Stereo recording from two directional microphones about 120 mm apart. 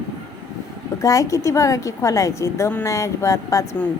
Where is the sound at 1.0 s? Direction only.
30° left (ahead or behind).